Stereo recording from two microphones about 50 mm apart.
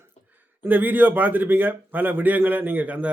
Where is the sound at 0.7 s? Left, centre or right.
Right.